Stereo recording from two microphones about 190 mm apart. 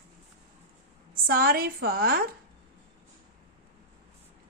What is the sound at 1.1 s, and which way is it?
A woman's voice, 50° right (ahead or behind).